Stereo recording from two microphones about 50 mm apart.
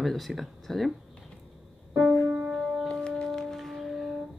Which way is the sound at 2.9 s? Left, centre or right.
Centre.